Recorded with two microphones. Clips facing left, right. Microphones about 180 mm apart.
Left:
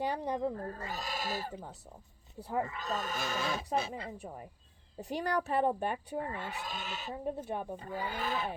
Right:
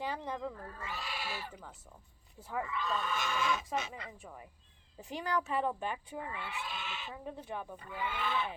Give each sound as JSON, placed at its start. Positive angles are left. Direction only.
{"t": 0.2, "sound": "speech", "side_deg": 35}
{"t": 7.7, "sound": "speech", "side_deg": 35}